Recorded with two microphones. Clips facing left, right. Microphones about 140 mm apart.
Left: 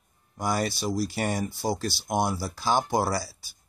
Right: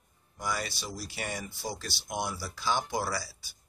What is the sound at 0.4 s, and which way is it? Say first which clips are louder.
Speech: left 7 dB; 45° left (ahead or behind).